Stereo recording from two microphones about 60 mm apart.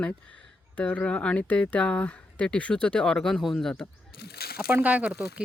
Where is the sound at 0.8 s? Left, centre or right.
Left; by 3.8 s centre.